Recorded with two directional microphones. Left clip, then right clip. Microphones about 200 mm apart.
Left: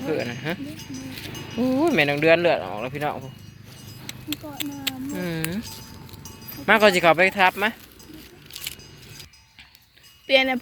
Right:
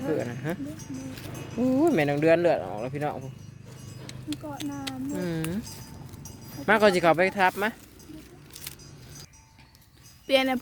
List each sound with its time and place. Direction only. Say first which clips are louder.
0.0 s speech: left 3 dB; 10° right (ahead or behind)
1.6 s speech: left 3 dB; 15° right (ahead or behind)
6.7 s speech: left 4 dB; 15° right (ahead or behind)
8.5 s music: left 9 dB; 40° right (ahead or behind)
10.2 s speech: left 4 dB; 20° right (ahead or behind)